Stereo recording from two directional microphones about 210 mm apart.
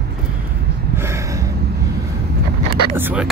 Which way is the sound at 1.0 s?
15° right (ahead or behind).